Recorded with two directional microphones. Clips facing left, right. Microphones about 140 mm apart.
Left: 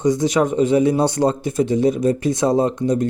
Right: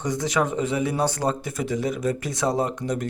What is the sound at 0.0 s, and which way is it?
Speech, 20° left (ahead or behind).